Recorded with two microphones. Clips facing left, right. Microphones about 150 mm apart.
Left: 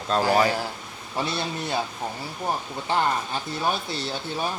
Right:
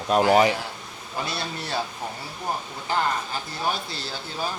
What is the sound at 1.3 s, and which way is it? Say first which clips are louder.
Speech: left 2 dB; 20° left (ahead or behind).